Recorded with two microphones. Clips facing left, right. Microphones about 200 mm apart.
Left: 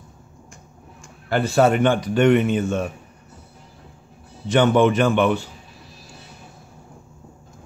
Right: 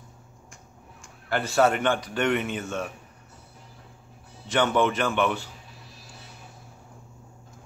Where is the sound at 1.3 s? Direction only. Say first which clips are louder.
Left 5 dB; 20° left (ahead or behind).